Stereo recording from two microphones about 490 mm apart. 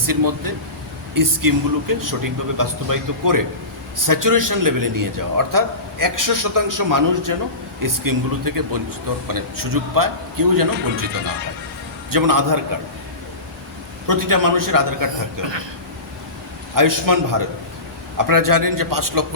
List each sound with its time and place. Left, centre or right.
0.0 s a man's voice: right
12.1 s a man's voice: right
14.1 s a man's voice: right
16.7 s a man's voice: right